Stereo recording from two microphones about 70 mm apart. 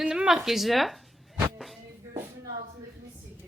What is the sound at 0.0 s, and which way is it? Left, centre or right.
Speech, centre.